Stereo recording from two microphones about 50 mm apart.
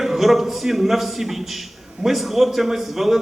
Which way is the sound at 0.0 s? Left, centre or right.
Centre.